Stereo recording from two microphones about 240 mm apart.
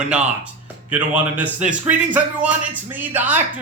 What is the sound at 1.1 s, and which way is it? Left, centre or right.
Speech, centre.